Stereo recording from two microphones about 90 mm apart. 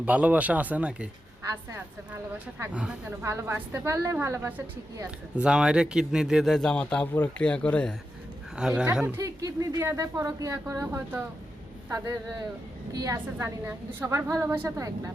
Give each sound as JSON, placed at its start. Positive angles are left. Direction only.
{"t": 0.0, "sound": "speech", "side_deg": -15}
{"t": 2.7, "sound": "speech", "side_deg": -10}
{"t": 3.2, "sound": "a woman's voice", "side_deg": -30}
{"t": 5.4, "sound": "a man's voice", "side_deg": -10}
{"t": 8.5, "sound": "speech", "side_deg": -10}
{"t": 9.2, "sound": "a woman's voice", "side_deg": -40}
{"t": 13.4, "sound": "a woman's voice", "side_deg": -30}